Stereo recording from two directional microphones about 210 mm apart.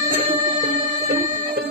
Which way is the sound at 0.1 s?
35° right (ahead or behind).